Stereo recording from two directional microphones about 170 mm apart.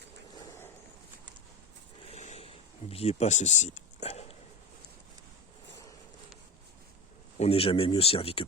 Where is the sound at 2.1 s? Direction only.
40° left (ahead or behind).